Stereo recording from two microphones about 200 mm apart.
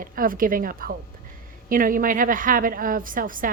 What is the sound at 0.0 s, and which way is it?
A woman's voice, 45° right (ahead or behind).